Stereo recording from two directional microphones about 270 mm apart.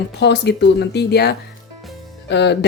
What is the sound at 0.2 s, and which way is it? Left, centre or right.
Speech, left.